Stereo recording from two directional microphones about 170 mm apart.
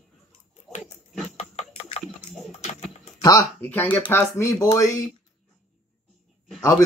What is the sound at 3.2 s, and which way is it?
Speech, 20° left (ahead or behind).